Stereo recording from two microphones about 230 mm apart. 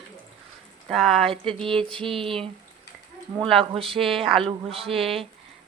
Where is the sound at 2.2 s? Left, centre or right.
Right.